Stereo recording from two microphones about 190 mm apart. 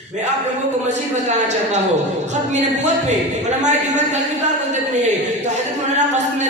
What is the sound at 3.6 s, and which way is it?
Speech, 40° right (ahead or behind).